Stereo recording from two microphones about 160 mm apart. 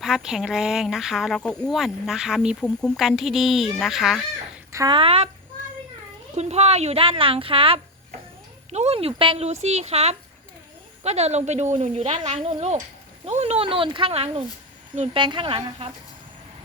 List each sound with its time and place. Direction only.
0.0 s speech: 5° right (ahead or behind)
4.7 s speech: 20° right (ahead or behind)
4.9 s speech: 35° right (ahead or behind)
6.3 s speech: 45° right (ahead or behind)